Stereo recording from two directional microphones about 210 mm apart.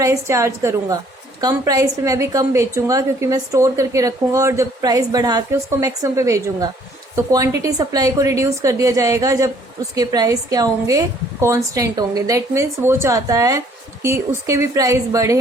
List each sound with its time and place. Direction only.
0.0 s a woman's voice: 15° right (ahead or behind)